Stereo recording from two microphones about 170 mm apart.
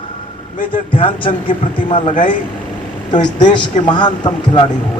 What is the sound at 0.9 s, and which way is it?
Speech, 30° left (ahead or behind).